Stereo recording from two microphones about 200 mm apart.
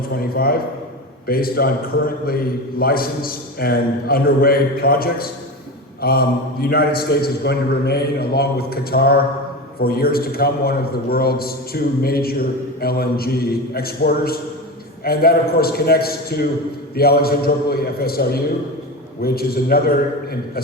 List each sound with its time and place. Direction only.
0.2 s a man's voice: 50° left (ahead or behind)